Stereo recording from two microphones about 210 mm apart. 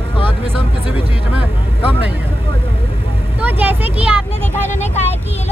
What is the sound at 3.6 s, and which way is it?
Speech, 10° right (ahead or behind).